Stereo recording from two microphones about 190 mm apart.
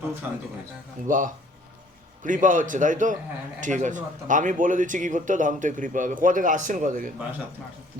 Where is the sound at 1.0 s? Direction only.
45° right (ahead or behind).